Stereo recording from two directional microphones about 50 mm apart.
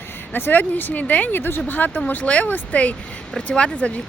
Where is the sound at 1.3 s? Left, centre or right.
Left.